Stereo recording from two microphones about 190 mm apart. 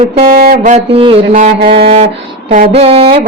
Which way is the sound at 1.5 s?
60° right (ahead or behind).